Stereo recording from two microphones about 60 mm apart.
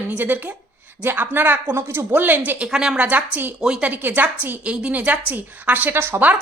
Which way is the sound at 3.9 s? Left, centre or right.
Right.